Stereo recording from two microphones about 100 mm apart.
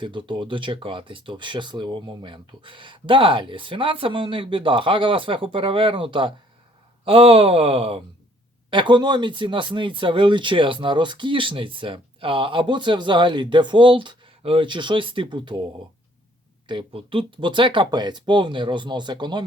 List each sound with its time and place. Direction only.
0.0 s speech: 55° right (ahead or behind)
7.0 s speech: 70° right (ahead or behind)
8.7 s speech: 50° right (ahead or behind)
16.6 s speech: 55° right (ahead or behind)